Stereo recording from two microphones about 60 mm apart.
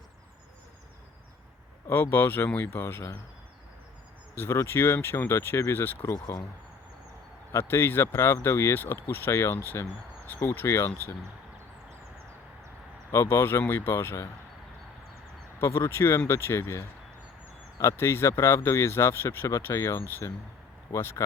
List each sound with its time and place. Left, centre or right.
1.9 s speech: left
4.5 s speech: left
4.9 s speech: left
7.5 s speech: left
13.1 s speech: left
15.5 s speech: left